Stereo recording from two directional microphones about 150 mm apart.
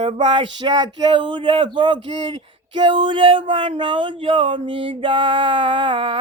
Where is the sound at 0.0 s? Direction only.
35° right (ahead or behind).